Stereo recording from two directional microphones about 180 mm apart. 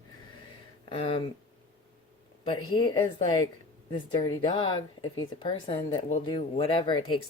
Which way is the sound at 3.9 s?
25° left (ahead or behind).